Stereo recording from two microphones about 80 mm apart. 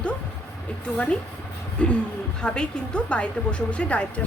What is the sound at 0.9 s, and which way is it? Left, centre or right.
A woman's voice, centre.